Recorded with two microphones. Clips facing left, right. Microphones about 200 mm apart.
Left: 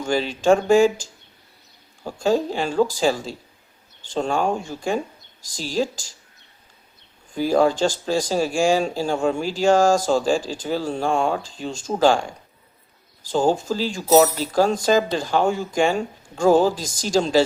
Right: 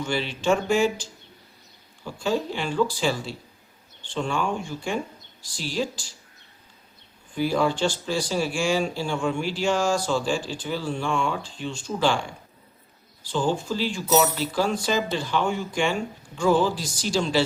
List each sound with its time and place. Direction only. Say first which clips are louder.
0.0 s speech: left 5 dB; 40° left (ahead or behind)
2.0 s speech: left 5 dB; 45° left (ahead or behind)
7.3 s speech: left 5 dB; 40° left (ahead or behind)